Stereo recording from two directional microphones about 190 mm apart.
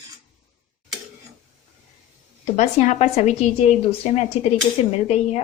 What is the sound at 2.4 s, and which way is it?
A woman's voice, 35° left (ahead or behind).